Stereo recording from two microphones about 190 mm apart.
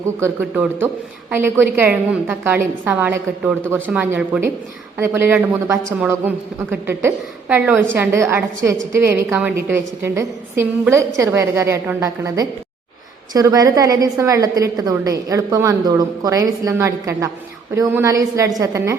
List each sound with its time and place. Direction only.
0.2 s a woman's voice: 10° right (ahead or behind)